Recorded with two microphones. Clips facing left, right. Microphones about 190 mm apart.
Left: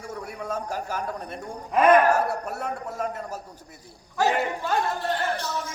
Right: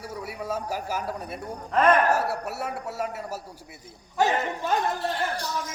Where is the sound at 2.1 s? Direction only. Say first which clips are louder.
Left 2 dB; 5° right (ahead or behind).